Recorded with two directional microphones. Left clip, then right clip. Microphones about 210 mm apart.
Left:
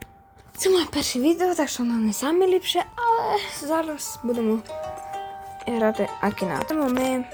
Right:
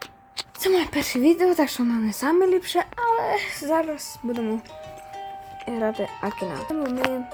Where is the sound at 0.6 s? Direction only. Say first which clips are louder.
Left 1 dB; 5° right (ahead or behind).